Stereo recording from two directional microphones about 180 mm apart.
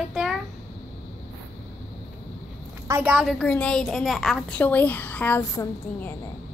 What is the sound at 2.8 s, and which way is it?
A woman's voice, 10° right (ahead or behind).